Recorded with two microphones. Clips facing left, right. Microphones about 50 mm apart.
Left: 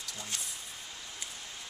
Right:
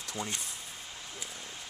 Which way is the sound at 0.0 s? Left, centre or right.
Right.